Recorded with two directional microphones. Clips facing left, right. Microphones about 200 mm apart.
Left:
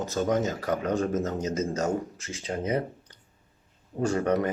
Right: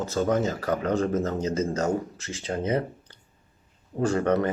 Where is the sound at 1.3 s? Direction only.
30° right (ahead or behind).